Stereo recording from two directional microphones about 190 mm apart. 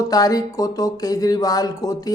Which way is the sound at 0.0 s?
20° left (ahead or behind).